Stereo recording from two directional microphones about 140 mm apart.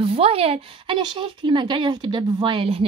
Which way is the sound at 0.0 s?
45° right (ahead or behind).